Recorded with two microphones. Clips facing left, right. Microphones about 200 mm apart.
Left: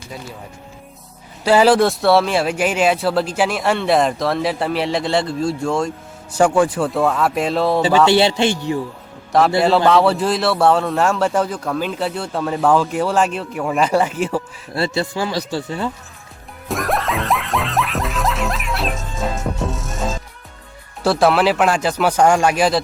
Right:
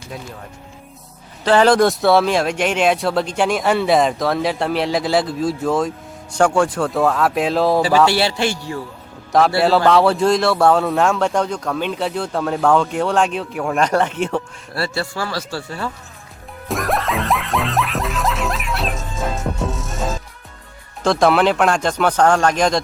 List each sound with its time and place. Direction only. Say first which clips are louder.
1.5 s speech: even; 5° left (ahead or behind)
8.0 s speech: left 3 dB; 20° left (ahead or behind)
9.6 s speech: even; centre (ahead or behind)
14.8 s speech: left 3 dB; 20° left (ahead or behind)
16.6 s music: even; centre (ahead or behind)
21.0 s speech: even; 5° left (ahead or behind)